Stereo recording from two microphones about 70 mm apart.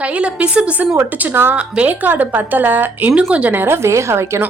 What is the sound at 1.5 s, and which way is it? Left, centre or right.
A woman's voice, centre.